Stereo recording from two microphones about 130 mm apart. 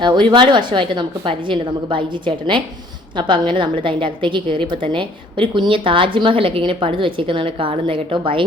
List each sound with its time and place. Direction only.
0.0 s a woman's voice: 35° right (ahead or behind)